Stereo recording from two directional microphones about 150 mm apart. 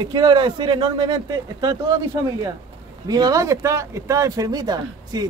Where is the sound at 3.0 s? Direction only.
25° right (ahead or behind).